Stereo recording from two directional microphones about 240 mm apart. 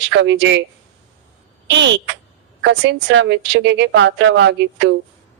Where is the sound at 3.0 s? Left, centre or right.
Right.